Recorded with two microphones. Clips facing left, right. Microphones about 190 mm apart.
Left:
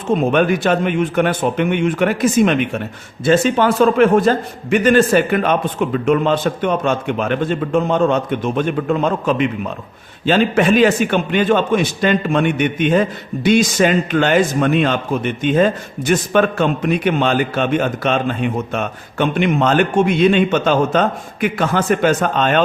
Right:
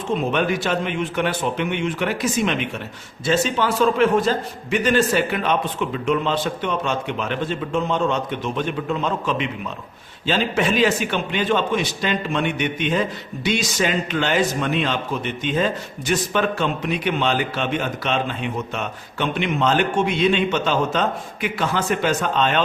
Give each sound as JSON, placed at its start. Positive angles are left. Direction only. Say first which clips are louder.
{"t": 0.1, "sound": "a man's voice", "louder": "left 6 dB", "side_deg": 50}